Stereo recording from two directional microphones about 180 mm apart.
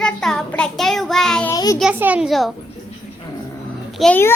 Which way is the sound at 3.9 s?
Centre (ahead or behind).